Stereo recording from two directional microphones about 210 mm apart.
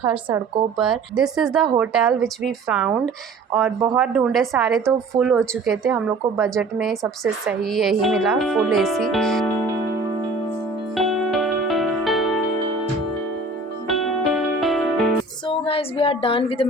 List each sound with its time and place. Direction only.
0.0 s a woman's voice: 5° right (ahead or behind)
3.9 s a woman's voice: 5° right (ahead or behind)
10.9 s music: centre (ahead or behind)
13.8 s music: centre (ahead or behind)
15.4 s a woman's voice: 25° left (ahead or behind)